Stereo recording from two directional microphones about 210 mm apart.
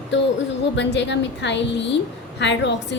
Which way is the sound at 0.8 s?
55° left (ahead or behind).